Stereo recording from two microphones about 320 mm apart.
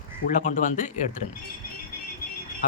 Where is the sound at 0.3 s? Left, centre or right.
Left.